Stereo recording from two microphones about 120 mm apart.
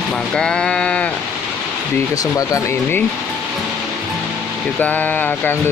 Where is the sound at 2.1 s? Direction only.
30° left (ahead or behind).